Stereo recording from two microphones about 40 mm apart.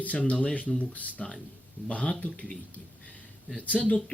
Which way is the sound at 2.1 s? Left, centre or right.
Left.